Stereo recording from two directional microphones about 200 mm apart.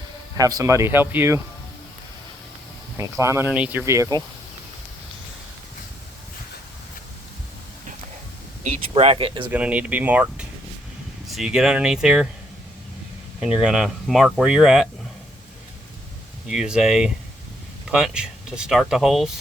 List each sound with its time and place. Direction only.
0.3 s speech: 20° right (ahead or behind)
3.0 s speech: 15° right (ahead or behind)
8.9 s speech: 30° right (ahead or behind)
9.5 s speech: 5° right (ahead or behind)
13.4 s speech: 5° right (ahead or behind)
16.5 s speech: 5° right (ahead or behind)